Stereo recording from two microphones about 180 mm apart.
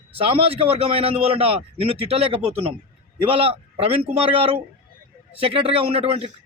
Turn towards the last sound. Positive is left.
turn(degrees=-30)  # may be behind; listen again after turning